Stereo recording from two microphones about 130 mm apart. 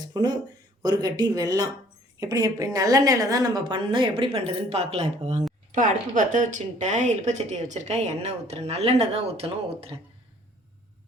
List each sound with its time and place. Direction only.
0.1 s a woman's voice: 30° right (ahead or behind); by 5.4 s 55° right (ahead or behind)
5.7 s speech: 80° right; by 9.9 s 50° right (ahead or behind)